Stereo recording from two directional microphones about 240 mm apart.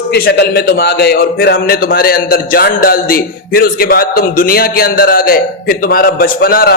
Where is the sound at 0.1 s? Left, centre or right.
Left.